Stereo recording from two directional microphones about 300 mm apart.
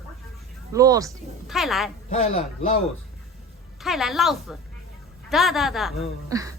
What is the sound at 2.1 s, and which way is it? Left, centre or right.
Speech, left.